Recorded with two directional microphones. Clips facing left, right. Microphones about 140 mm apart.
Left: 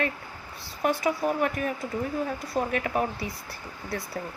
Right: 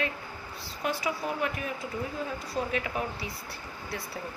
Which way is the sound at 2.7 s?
50° left (ahead or behind).